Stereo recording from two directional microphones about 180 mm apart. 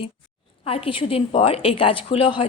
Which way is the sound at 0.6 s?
30° left (ahead or behind).